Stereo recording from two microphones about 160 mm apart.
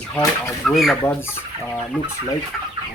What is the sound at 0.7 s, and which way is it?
Speech, centre (ahead or behind).